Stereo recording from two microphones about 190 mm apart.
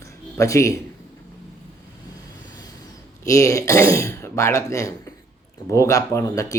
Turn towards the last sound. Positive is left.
turn(degrees=15)  # may be behind; listen again after turning